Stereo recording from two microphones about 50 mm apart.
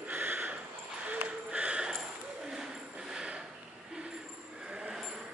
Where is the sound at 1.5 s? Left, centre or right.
Right.